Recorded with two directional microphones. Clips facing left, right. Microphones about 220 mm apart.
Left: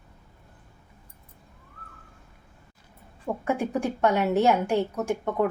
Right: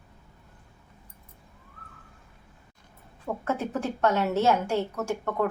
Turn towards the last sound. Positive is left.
turn(degrees=15)  # may be behind; listen again after turning